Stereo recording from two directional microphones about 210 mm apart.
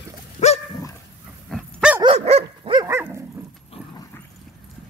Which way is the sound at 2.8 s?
10° right (ahead or behind).